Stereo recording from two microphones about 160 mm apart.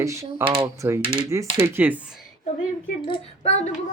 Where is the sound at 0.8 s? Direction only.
15° right (ahead or behind).